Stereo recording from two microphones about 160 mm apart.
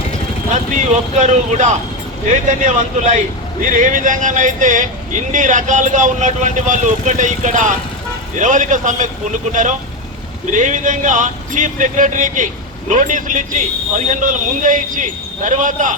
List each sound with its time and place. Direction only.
0.5 s a man's voice: 50° right (ahead or behind)